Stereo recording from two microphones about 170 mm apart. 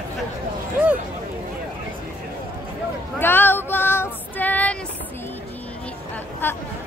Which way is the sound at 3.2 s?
10° left (ahead or behind).